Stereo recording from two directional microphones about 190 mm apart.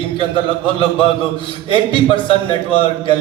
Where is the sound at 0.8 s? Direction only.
25° left (ahead or behind).